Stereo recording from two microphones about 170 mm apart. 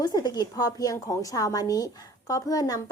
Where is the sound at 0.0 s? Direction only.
25° left (ahead or behind).